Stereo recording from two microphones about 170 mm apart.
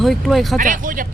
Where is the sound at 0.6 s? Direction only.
50° right (ahead or behind).